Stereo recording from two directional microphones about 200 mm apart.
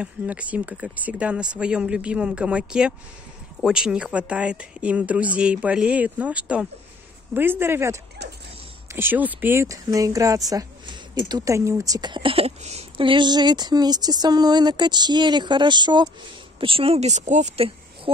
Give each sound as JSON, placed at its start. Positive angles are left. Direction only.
{"t": 0.0, "sound": "speech", "side_deg": -5}